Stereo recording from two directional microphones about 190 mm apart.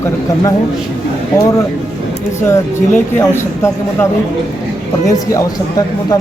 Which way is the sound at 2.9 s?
15° left (ahead or behind).